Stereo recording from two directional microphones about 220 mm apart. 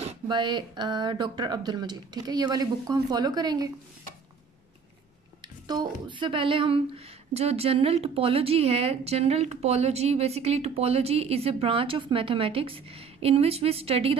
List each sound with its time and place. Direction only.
0.0 s a woman's voice: 25° right (ahead or behind)
5.7 s a woman's voice: 20° right (ahead or behind)